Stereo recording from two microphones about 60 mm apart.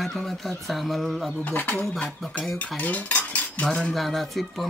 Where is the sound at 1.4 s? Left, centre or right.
Left.